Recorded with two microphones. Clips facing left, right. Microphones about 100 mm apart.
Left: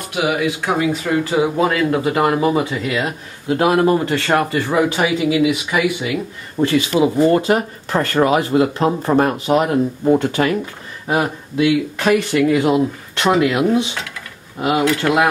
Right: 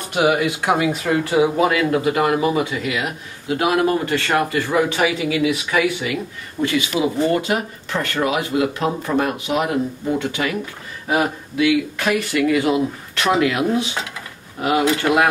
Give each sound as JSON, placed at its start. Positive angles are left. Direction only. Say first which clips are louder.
{"t": 0.7, "sound": "speech", "louder": "right 1 dB", "side_deg": -5}
{"t": 1.9, "sound": "speech", "louder": "left 1 dB", "side_deg": 25}
{"t": 6.6, "sound": "speech", "louder": "left 4 dB", "side_deg": 35}
{"t": 11.1, "sound": "speech", "louder": "left 1 dB", "side_deg": 25}